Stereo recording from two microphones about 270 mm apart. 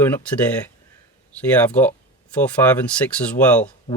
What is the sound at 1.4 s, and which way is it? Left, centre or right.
Speech, centre.